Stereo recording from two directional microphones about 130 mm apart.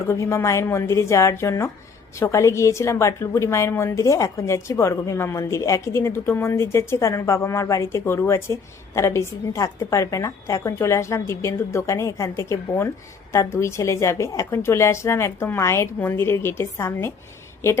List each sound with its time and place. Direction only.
0.1 s a woman's voice: 20° left (ahead or behind)